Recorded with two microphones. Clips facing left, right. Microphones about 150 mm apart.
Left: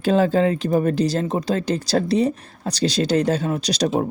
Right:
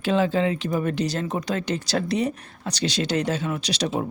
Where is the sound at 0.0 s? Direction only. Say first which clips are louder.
Left 4 dB; 40° left (ahead or behind).